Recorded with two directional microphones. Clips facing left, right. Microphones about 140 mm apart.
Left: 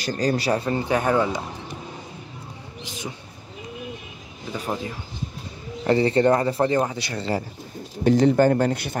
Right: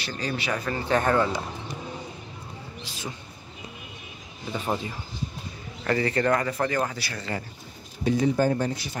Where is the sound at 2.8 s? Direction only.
15° left (ahead or behind).